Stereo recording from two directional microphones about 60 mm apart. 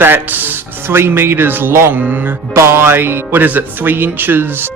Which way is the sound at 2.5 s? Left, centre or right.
Right.